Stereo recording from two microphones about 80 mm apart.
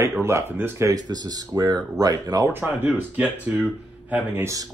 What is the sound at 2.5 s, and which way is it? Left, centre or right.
Speech, right.